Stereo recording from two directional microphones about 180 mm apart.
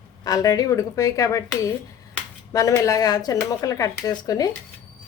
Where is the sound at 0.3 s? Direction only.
20° left (ahead or behind).